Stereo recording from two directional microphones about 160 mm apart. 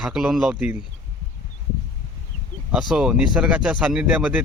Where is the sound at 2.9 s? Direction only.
5° right (ahead or behind).